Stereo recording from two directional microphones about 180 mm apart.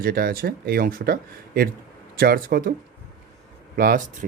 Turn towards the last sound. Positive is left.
turn(degrees=-55)  # may be behind; listen again after turning